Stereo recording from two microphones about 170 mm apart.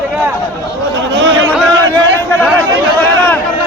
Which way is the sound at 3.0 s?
10° left (ahead or behind).